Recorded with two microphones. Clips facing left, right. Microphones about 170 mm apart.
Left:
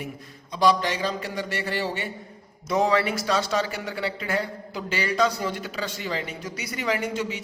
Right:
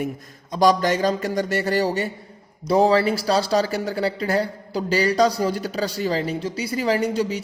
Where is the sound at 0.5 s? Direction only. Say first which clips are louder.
Right 4 dB; 45° right (ahead or behind).